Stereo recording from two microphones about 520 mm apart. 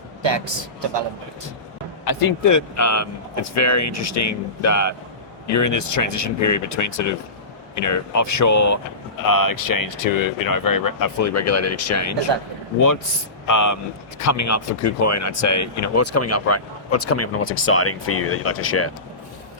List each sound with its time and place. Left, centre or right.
0.2 s a man's voice: right
2.0 s speech: left
13.5 s speech: left